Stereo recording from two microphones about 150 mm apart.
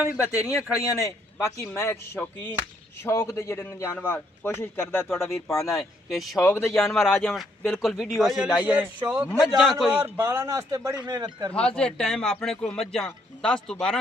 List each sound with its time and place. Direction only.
0.2 s a man's voice: 20° left (ahead or behind)
5.7 s speech: centre (ahead or behind)
6.4 s a man's voice: 15° left (ahead or behind)
6.7 s speech: centre (ahead or behind)
8.6 s a man's voice: 10° right (ahead or behind)
9.9 s speech: 15° right (ahead or behind)
11.5 s speech: 5° left (ahead or behind)